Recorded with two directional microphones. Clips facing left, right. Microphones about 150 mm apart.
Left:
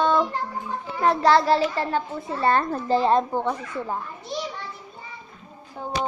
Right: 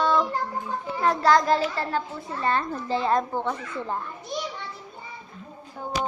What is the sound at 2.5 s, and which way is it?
Speech, 50° left (ahead or behind).